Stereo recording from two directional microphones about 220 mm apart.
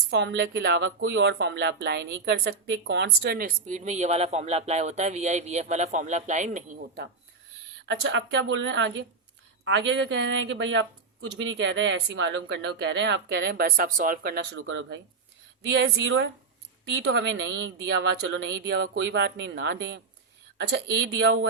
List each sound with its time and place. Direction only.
0.1 s speech: 50° right (ahead or behind)
7.9 s speech: 55° right (ahead or behind)
14.6 s speech: 60° right (ahead or behind)
18.4 s speech: 50° right (ahead or behind)